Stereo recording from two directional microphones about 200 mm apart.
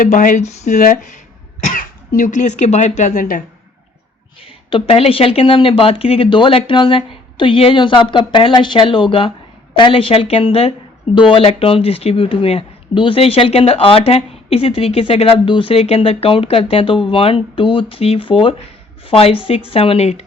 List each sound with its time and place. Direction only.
0.0 s speech: 40° left (ahead or behind)
4.4 s a woman's voice: 25° left (ahead or behind)